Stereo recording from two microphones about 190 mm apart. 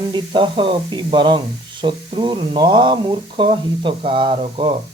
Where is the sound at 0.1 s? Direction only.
25° right (ahead or behind).